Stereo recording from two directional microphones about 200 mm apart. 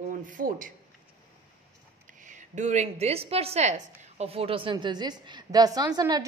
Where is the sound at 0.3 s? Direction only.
45° right (ahead or behind).